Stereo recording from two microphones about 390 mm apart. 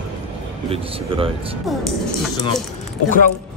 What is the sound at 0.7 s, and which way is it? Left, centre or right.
Speech, centre.